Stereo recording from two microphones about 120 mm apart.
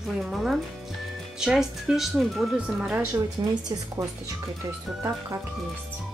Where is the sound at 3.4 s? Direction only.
35° right (ahead or behind).